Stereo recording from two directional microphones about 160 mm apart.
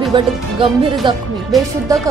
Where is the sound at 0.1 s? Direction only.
30° right (ahead or behind).